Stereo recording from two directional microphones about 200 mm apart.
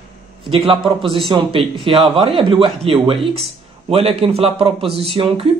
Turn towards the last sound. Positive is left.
turn(degrees=-30)  # may be behind; listen again after turning